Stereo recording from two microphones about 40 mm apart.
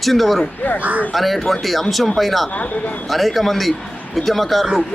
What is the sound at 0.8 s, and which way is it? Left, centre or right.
Speech, right.